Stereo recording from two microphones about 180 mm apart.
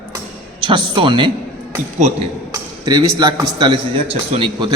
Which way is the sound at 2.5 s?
25° right (ahead or behind).